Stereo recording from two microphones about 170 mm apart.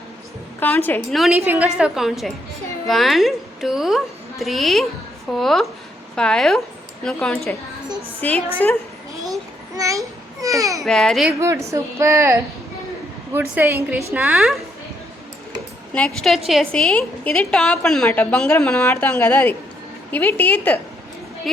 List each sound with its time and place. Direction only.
0.6 s a woman's voice: 10° left (ahead or behind)
1.5 s a woman's voice: 5° right (ahead or behind); by 8.8 s 10° left (ahead or behind)
9.7 s a child's voice: 20° right (ahead or behind)
10.8 s a woman's voice: 5° left (ahead or behind)
11.3 s speech: 15° right (ahead or behind)
13.4 s a woman's voice: 10° right (ahead or behind)
16.0 s a woman's voice: 5° left (ahead or behind)